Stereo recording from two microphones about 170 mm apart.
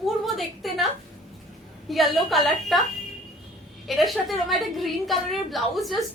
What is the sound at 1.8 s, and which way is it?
Speech, centre (ahead or behind).